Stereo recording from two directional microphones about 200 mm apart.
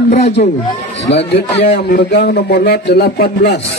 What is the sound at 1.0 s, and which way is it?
A man's voice, 60° left (ahead or behind).